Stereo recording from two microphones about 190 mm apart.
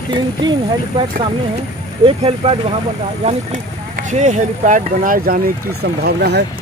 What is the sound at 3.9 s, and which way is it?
Speech, 40° right (ahead or behind).